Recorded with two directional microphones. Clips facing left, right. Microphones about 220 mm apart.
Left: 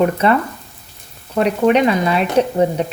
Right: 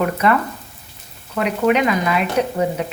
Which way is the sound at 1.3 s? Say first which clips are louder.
Left 3 dB; 35° left (ahead or behind).